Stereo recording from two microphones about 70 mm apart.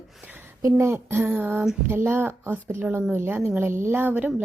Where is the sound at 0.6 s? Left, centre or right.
Right.